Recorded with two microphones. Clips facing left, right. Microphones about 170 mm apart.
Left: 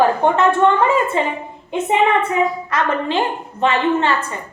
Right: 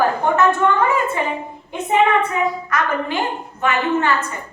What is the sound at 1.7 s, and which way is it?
A woman's voice, 25° left (ahead or behind).